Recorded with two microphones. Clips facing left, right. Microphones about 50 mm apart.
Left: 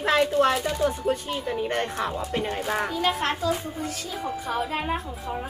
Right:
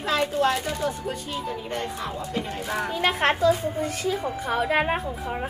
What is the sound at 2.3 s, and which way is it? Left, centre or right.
Speech, left.